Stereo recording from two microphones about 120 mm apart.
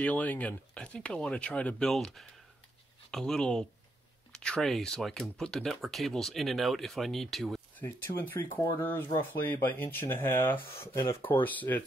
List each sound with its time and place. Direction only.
0.0 s speech: 15° left (ahead or behind)
7.8 s speech: 15° left (ahead or behind)